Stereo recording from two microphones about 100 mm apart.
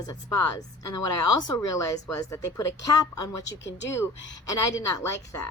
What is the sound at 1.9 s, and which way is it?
Speech, 30° left (ahead or behind).